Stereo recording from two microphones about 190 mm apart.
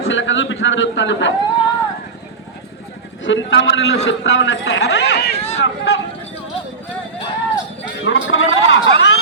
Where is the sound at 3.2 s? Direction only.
75° left (ahead or behind); by 5.3 s 60° left (ahead or behind).